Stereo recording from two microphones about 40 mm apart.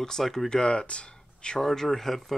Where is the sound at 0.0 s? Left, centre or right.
Centre.